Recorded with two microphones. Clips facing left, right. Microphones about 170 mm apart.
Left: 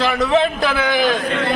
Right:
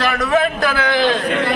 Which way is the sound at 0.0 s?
20° left (ahead or behind).